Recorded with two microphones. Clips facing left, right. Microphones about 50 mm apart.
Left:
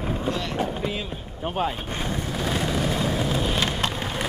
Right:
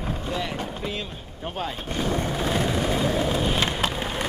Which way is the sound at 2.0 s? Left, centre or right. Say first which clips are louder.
Right 5 dB; right.